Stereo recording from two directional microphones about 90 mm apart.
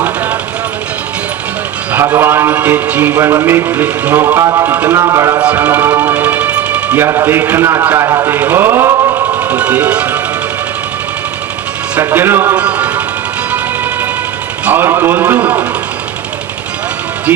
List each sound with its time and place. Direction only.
1.9 s a man's voice: 25° right (ahead or behind)
3.2 s speech: 35° right (ahead or behind)
3.4 s a man's voice: 20° right (ahead or behind)
4.2 s speech: 30° right (ahead or behind)
5.4 s music: 15° right (ahead or behind)
7.0 s a man's voice: 30° right (ahead or behind)
8.4 s a sound: 20° right (ahead or behind)
9.4 s speech: 15° right (ahead or behind)
11.9 s a man's voice: 25° right (ahead or behind)
12.5 s speech: 15° right (ahead or behind)
14.6 s a man's voice: 25° right (ahead or behind)